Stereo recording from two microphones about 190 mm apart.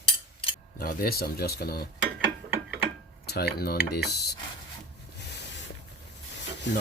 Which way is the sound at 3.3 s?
55° left (ahead or behind).